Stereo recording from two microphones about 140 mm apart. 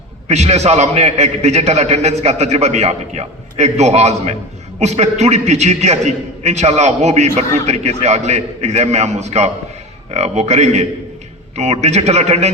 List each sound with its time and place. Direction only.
0.3 s a man's voice: 50° right (ahead or behind)